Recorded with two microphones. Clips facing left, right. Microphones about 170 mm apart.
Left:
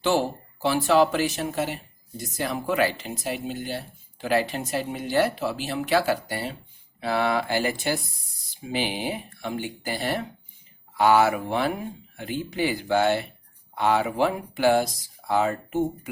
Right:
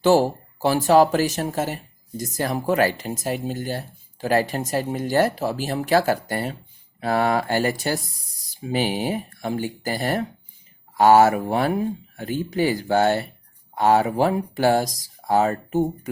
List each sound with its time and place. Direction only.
0.0 s speech: 40° right (ahead or behind)